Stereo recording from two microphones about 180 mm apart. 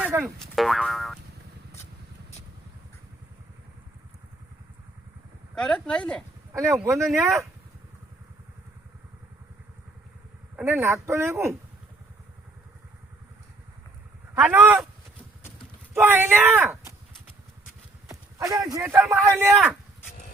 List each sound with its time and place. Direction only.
0.0 s boing: 10° right (ahead or behind)
0.4 s boing: centre (ahead or behind)
5.5 s boing: 5° left (ahead or behind)
6.5 s speech: 15° right (ahead or behind)
7.1 s boing: centre (ahead or behind)
10.6 s speech: 15° right (ahead or behind)
14.3 s speech: 10° right (ahead or behind)
16.0 s speech: 10° right (ahead or behind)
18.1 s speech: 20° right (ahead or behind)